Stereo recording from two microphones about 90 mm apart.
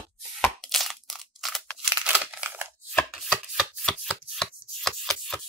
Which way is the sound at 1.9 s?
15° right (ahead or behind).